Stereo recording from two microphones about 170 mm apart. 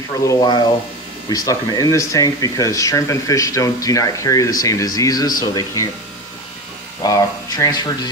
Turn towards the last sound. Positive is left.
turn(degrees=20)  # may be behind; listen again after turning